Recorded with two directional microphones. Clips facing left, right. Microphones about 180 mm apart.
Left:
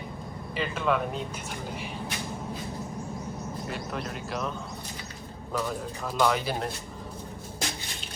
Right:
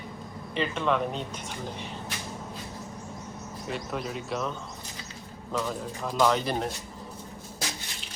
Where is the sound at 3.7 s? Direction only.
Centre (ahead or behind).